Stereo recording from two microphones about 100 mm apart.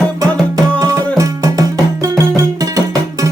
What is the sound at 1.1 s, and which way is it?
Music, 35° right (ahead or behind).